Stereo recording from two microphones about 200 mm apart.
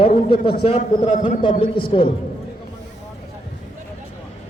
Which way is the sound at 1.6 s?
25° left (ahead or behind).